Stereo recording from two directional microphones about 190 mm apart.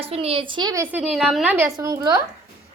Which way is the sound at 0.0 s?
30° right (ahead or behind).